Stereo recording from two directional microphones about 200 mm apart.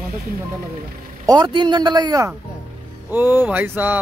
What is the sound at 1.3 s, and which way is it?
A man's voice, 25° right (ahead or behind).